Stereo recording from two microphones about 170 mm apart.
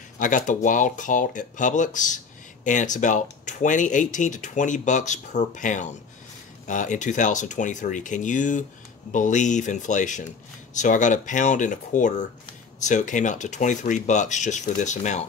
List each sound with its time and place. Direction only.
0.2 s speech: 50° left (ahead or behind)